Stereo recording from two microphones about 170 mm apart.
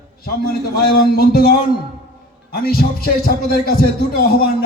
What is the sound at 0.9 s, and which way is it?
Speech, 65° left (ahead or behind).